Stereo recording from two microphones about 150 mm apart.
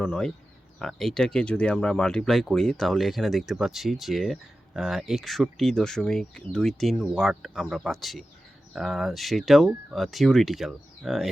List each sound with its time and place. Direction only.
0.1 s speech: 5° left (ahead or behind)